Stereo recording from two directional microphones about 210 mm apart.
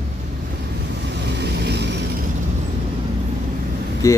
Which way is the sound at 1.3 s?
55° right (ahead or behind).